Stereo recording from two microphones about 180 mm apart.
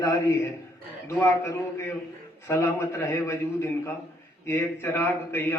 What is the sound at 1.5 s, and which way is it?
A man's voice, 15° left (ahead or behind).